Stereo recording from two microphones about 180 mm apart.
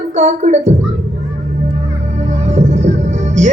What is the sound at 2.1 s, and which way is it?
Music, 40° right (ahead or behind).